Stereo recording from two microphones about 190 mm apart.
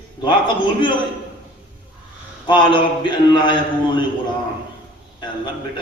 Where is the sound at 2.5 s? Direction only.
25° left (ahead or behind).